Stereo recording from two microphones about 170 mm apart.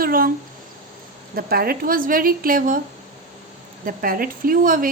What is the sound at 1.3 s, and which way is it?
A woman's voice, 60° right (ahead or behind).